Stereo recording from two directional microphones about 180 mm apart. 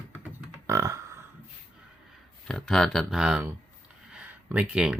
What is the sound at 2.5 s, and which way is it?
Speech, centre (ahead or behind).